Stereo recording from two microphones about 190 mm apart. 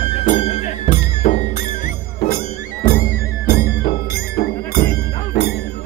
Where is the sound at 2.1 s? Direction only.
55° left (ahead or behind).